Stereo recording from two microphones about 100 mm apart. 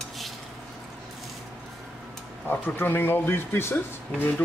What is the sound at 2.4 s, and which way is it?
Speech, 20° left (ahead or behind).